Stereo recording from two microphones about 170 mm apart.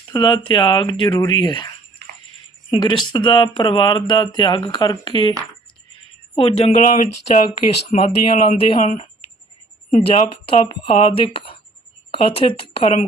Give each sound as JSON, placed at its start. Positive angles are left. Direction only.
{"t": 0.1, "sound": "speech", "side_deg": 25}
{"t": 6.3, "sound": "speech", "side_deg": 35}
{"t": 6.9, "sound": "speech", "side_deg": 50}
{"t": 10.1, "sound": "speech", "side_deg": 35}